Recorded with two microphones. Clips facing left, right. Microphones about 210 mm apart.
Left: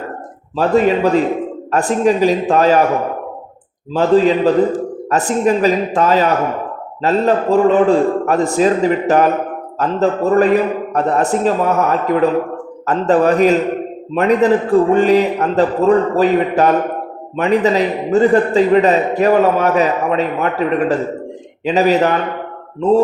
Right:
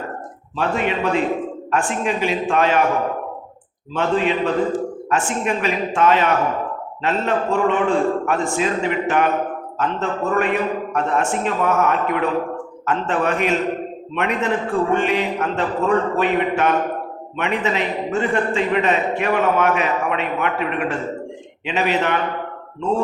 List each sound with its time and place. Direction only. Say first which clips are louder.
0.5 s a man's voice: left 8 dB; 40° left (ahead or behind)
3.9 s a man's voice: left 8 dB; 35° left (ahead or behind)